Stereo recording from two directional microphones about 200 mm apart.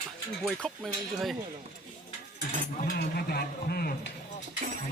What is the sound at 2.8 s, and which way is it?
Speech, 50° left (ahead or behind).